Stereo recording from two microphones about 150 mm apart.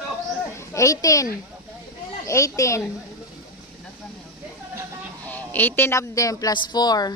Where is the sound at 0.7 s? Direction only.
20° left (ahead or behind).